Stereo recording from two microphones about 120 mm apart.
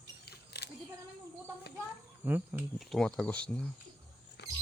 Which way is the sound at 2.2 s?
15° right (ahead or behind).